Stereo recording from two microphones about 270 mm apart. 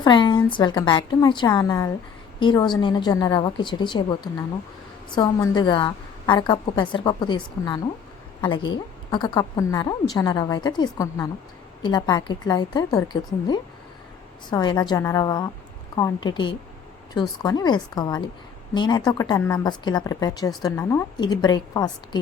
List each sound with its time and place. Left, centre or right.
0.0 s a woman's voice: centre
14.5 s a woman's voice: centre